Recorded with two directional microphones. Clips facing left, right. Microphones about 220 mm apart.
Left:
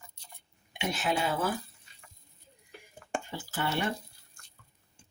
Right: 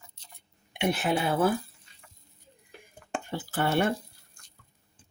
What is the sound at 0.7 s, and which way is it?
Speech, 55° right (ahead or behind).